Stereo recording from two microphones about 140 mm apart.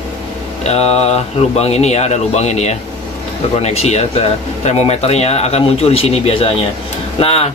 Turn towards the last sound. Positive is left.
turn(degrees=45)  # may be behind; listen again after turning